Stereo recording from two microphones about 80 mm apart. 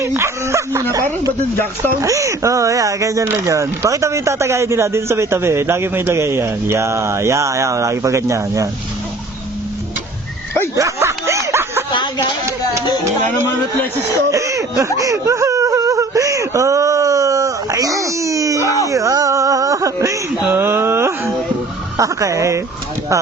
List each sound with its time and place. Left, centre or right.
0.0 s speech: right
2.0 s speech: right
10.8 s a sound: right
11.9 s a sound: left
14.3 s speech: right
14.9 s whimper: right
18.9 s speech: right
20.5 s a sound: right
21.9 s speech: right